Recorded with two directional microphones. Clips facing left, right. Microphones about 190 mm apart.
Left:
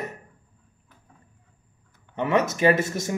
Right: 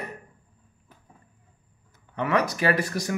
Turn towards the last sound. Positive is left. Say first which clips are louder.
# left 4 dB
turn(degrees=25)  # may be behind; listen again after turning